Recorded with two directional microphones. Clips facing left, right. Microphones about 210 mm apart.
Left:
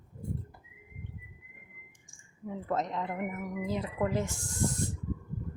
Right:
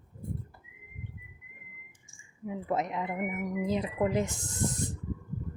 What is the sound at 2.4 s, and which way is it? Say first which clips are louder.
Speech: right 1 dB; 10° right (ahead or behind).